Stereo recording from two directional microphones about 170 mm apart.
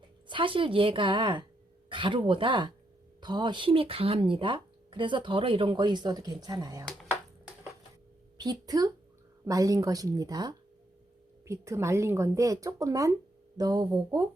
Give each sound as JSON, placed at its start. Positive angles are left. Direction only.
{"t": 0.3, "sound": "speech", "side_deg": -30}
{"t": 8.4, "sound": "speech", "side_deg": -25}